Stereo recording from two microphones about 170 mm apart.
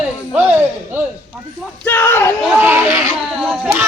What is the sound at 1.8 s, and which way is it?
Speech, 15° left (ahead or behind).